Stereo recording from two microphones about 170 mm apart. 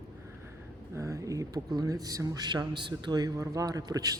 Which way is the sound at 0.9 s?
20° right (ahead or behind).